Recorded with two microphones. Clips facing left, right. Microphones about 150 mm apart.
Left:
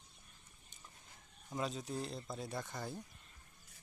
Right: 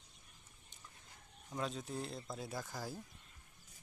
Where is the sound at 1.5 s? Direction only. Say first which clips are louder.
Left 1 dB; 5° left (ahead or behind).